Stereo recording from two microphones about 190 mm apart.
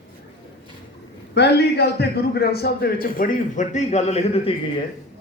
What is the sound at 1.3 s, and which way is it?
A man's voice, 60° left (ahead or behind).